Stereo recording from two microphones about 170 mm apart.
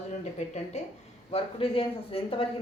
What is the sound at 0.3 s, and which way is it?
Speech, 40° left (ahead or behind).